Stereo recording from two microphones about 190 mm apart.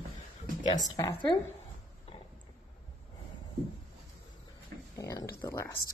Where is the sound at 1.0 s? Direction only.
20° left (ahead or behind).